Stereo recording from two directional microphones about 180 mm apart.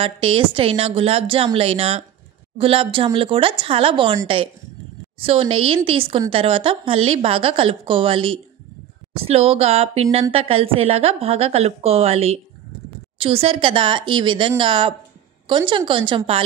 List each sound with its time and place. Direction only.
0.0 s a woman's voice: 30° right (ahead or behind)
5.2 s a woman's voice: 30° right (ahead or behind)